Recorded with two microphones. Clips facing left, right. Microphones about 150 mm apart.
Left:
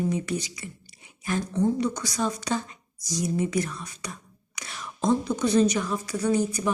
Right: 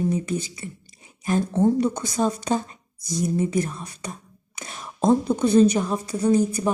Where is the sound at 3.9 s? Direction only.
50° right (ahead or behind).